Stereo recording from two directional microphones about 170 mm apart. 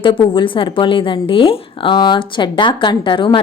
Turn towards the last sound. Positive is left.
turn(degrees=30)  # may be behind; listen again after turning